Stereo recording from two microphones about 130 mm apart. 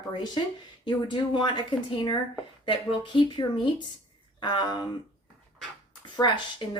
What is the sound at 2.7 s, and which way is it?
Speech, 40° left (ahead or behind).